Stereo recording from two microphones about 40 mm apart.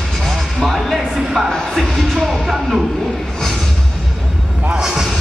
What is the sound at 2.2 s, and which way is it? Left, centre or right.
Music, centre.